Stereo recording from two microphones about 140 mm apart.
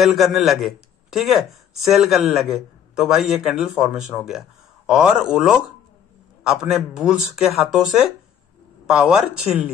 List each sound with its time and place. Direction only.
0.0 s a man's voice: centre (ahead or behind)